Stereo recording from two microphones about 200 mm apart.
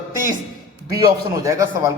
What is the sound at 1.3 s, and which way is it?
Speech, 15° right (ahead or behind).